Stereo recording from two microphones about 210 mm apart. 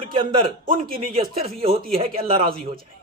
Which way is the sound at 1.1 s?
30° right (ahead or behind).